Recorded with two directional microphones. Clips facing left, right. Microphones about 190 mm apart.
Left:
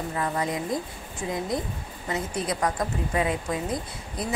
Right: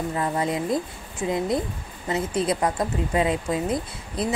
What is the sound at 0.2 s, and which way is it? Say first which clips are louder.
Speech: right 2 dB; 25° right (ahead or behind).